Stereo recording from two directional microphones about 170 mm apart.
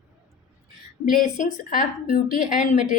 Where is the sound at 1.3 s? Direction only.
50° left (ahead or behind).